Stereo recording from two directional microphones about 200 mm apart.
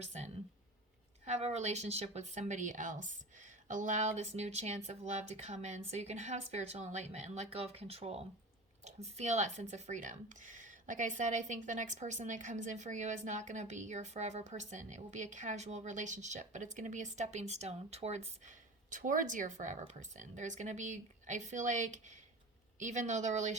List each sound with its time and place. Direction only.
0.0 s speech: 35° right (ahead or behind)